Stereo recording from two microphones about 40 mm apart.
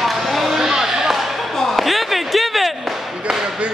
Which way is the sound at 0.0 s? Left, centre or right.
Centre.